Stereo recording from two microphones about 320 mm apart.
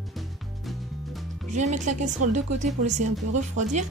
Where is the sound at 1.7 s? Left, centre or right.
Right.